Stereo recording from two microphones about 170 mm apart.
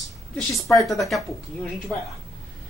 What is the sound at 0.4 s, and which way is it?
Speech, centre (ahead or behind).